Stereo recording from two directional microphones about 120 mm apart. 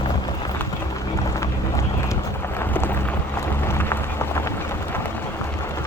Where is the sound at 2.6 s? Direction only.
15° left (ahead or behind).